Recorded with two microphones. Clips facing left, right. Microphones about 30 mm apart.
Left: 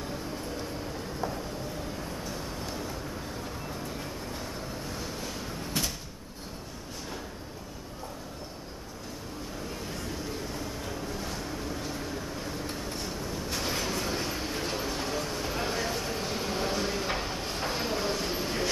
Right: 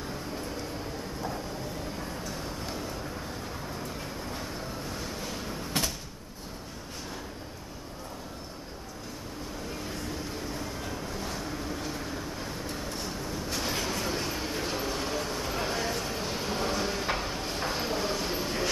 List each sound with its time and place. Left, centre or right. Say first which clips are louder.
4.9 s waves: even; centre
5.7 s cupboard open or close: right 1 dB; right
10.5 s vehicle: even; centre
12.7 s train: even; centre